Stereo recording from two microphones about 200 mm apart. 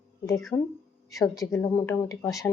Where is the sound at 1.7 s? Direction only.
15° left (ahead or behind).